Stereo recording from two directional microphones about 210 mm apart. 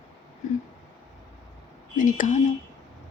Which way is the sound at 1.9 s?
40° left (ahead or behind).